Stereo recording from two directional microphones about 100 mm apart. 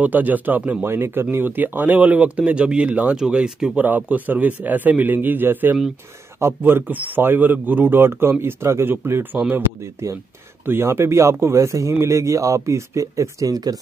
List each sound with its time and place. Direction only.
0.0 s speech: 15° right (ahead or behind)
10.6 s speech: 20° right (ahead or behind)